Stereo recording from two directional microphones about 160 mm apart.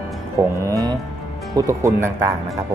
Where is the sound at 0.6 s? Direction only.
20° right (ahead or behind).